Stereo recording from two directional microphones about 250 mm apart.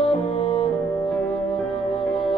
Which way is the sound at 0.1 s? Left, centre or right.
Left.